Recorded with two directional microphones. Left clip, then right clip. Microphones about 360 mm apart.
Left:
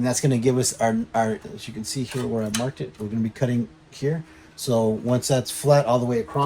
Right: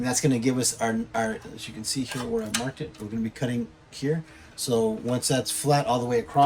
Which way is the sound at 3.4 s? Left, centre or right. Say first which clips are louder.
Left 6 dB; centre.